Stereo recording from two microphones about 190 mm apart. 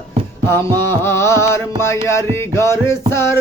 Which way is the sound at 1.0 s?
15° left (ahead or behind).